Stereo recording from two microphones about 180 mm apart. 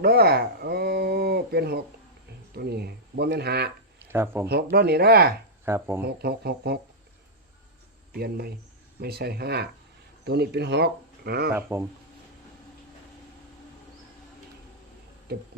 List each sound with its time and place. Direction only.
0.0 s speech: 60° right (ahead or behind)
4.0 s speech: 10° right (ahead or behind)
4.4 s speech: 60° right (ahead or behind)
5.6 s speech: 15° right (ahead or behind)
6.0 s speech: 60° right (ahead or behind)
8.1 s speech: 60° right (ahead or behind)
15.3 s speech: 60° right (ahead or behind)